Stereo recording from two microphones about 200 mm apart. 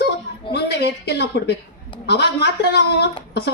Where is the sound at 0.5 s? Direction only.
55° left (ahead or behind).